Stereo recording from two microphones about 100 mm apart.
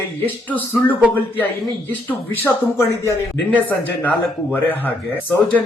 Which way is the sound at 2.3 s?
25° left (ahead or behind).